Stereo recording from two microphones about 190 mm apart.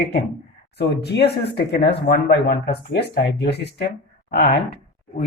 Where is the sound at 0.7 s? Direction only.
60° left (ahead or behind).